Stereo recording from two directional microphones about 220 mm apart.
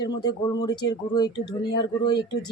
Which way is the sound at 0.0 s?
20° left (ahead or behind).